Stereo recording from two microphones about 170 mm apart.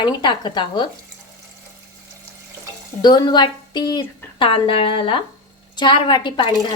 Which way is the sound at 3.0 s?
25° left (ahead or behind).